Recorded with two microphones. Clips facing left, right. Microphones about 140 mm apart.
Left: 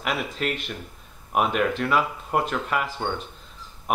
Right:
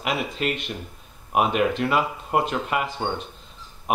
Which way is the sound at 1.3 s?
15° right (ahead or behind).